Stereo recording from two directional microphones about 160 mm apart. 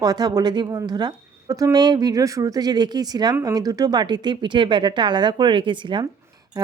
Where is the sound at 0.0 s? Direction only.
25° right (ahead or behind).